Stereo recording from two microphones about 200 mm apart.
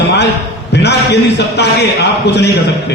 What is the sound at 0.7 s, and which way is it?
A man's voice, 55° left (ahead or behind).